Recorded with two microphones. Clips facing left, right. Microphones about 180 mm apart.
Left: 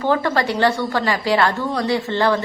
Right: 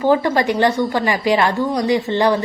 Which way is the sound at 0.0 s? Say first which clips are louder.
Right 3 dB; 15° right (ahead or behind).